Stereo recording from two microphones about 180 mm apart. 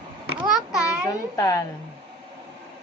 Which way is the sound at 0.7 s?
5° right (ahead or behind).